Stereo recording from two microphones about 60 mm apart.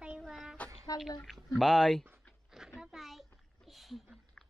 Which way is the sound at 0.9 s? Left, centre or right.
Left.